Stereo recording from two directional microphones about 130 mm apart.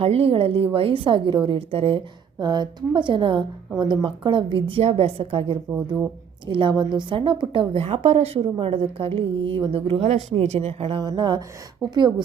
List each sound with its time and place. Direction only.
0.0 s a woman's voice: 50° right (ahead or behind)
5.7 s speech: 10° right (ahead or behind)
6.5 s a woman's voice: 40° right (ahead or behind)
11.8 s speech: 5° left (ahead or behind)